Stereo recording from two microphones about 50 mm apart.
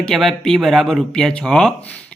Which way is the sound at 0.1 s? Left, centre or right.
Centre.